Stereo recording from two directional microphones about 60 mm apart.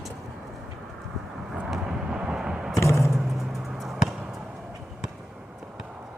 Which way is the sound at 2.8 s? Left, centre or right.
Left.